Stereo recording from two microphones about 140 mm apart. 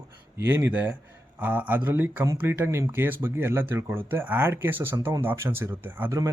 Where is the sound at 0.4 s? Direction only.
10° right (ahead or behind).